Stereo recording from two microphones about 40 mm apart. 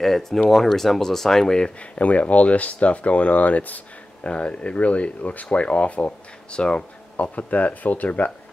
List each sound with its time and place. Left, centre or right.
0.0 s speech: centre
1.8 s speech: left
4.2 s speech: left